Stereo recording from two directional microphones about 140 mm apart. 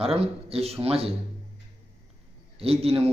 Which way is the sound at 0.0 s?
45° right (ahead or behind).